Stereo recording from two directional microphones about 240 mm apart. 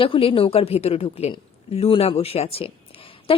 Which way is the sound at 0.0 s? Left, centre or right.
Left.